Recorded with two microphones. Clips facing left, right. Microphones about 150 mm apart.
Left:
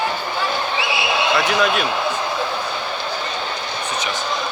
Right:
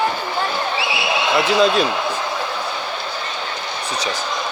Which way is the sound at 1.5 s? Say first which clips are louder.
Right 3 dB; 30° right (ahead or behind).